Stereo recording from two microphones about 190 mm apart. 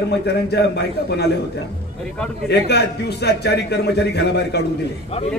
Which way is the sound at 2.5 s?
60° left (ahead or behind).